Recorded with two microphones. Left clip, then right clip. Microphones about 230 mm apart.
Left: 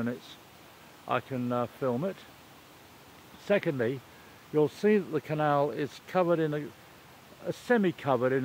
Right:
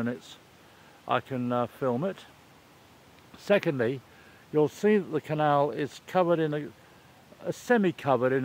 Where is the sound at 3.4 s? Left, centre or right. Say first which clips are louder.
Right 3 dB; centre.